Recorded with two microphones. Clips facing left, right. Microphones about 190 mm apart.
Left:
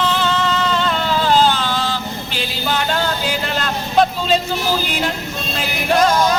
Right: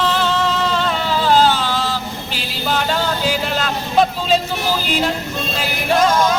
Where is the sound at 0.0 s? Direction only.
5° right (ahead or behind).